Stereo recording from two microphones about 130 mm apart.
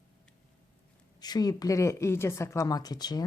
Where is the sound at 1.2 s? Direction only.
30° left (ahead or behind).